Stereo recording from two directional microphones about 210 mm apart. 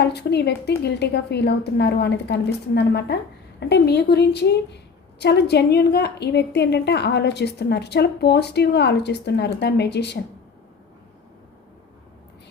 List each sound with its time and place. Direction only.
0.0 s a woman's voice: 50° left (ahead or behind)